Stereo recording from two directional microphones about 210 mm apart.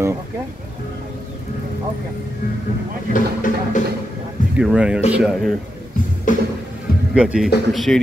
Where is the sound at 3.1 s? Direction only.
40° left (ahead or behind).